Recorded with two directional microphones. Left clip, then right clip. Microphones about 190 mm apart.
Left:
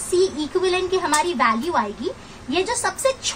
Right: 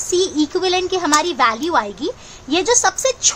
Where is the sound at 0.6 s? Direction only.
50° right (ahead or behind).